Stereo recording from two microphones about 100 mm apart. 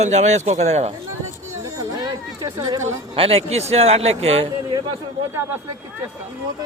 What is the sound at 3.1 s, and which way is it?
A man's voice, 70° right (ahead or behind).